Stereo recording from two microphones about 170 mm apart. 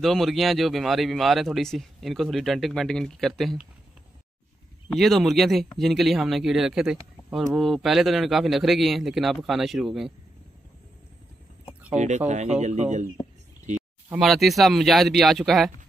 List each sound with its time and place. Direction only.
0.0 s speech: centre (ahead or behind)
4.9 s speech: centre (ahead or behind)
11.9 s speech: 45° right (ahead or behind)
14.0 s speech: 5° right (ahead or behind)